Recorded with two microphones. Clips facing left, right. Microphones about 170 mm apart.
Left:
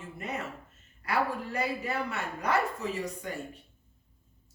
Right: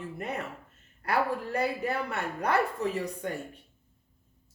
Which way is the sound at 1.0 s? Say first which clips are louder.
Right 2 dB; 55° right (ahead or behind).